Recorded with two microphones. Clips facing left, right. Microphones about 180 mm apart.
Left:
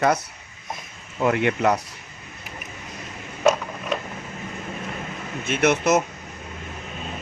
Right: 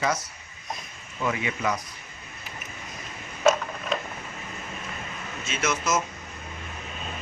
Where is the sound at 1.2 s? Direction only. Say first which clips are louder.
Left 8 dB; 65° left (ahead or behind).